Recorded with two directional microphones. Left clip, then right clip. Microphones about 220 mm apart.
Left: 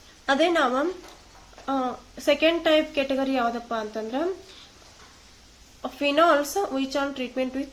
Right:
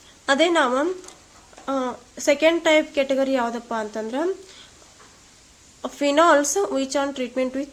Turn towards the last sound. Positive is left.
turn(degrees=-35)  # may be behind; listen again after turning